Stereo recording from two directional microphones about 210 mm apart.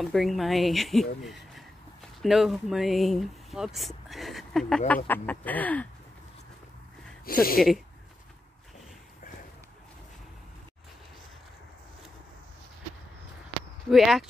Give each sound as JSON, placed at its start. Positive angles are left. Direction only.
{"t": 0.0, "sound": "speech", "side_deg": 0}
{"t": 7.2, "sound": "speech", "side_deg": 45}
{"t": 13.8, "sound": "speech", "side_deg": 0}